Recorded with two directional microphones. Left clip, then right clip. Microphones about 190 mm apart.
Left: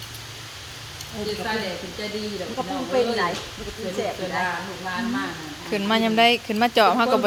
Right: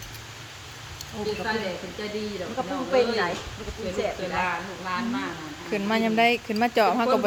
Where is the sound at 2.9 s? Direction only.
30° left (ahead or behind).